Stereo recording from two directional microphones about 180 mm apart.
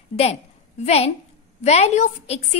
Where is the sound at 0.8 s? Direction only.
35° left (ahead or behind).